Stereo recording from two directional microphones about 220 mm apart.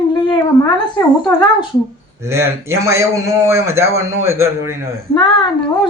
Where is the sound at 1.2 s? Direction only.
20° left (ahead or behind).